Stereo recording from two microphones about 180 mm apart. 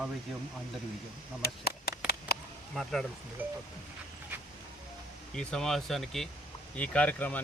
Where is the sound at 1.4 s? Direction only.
60° left (ahead or behind).